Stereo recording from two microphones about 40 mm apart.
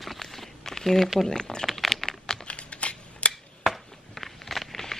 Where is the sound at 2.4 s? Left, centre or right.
Left.